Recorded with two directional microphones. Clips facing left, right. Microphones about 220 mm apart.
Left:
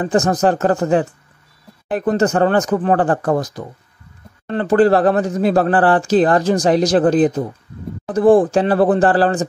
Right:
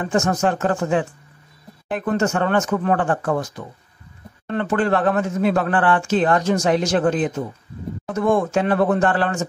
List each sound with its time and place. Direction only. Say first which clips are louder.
0.0 s speech: left 4 dB; 35° left (ahead or behind)